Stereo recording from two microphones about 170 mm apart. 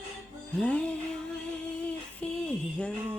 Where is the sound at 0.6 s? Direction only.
5° left (ahead or behind).